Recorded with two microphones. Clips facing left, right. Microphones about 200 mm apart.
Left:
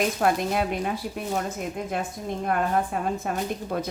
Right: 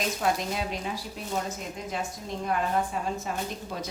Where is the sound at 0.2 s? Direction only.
55° left (ahead or behind).